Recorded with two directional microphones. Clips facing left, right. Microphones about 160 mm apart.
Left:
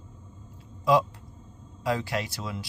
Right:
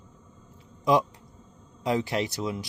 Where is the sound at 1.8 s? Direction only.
20° right (ahead or behind).